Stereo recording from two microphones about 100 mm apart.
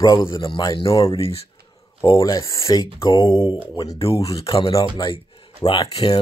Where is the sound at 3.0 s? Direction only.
60° left (ahead or behind).